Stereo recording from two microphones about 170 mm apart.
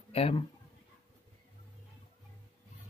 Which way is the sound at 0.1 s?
35° left (ahead or behind).